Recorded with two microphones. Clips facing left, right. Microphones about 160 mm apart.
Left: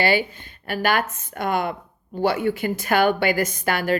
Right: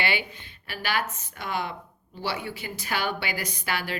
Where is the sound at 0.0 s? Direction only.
40° left (ahead or behind).